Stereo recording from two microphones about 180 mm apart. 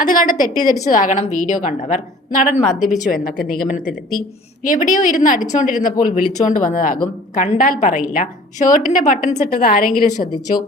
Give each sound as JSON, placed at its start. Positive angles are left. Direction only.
{"t": 0.0, "sound": "a woman's voice", "side_deg": 45}